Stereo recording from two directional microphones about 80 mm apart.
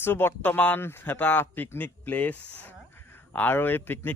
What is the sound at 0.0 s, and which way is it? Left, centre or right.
Speech, left.